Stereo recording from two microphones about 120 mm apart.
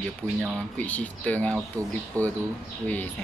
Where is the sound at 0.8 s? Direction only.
10° left (ahead or behind).